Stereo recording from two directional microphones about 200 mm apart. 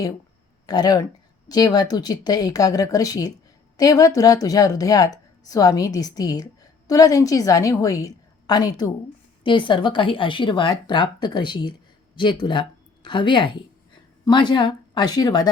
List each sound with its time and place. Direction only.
0.7 s a woman's voice: 20° left (ahead or behind)